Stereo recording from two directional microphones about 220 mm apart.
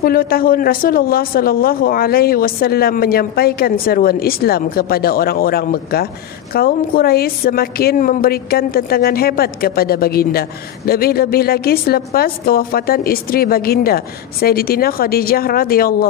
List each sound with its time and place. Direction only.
0.0 s speech: 40° left (ahead or behind)